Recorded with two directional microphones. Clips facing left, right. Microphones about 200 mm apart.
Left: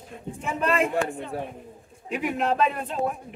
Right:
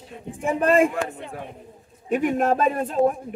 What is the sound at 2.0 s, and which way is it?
Speech, 45° right (ahead or behind).